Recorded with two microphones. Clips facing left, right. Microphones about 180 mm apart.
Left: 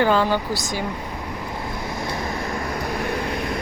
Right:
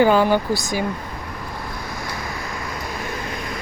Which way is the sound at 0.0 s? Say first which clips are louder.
Right 3 dB; 10° right (ahead or behind).